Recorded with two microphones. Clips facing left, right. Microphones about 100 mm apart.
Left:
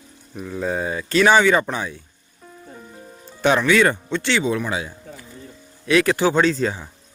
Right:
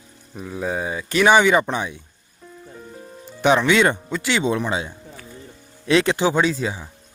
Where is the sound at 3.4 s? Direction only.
15° right (ahead or behind).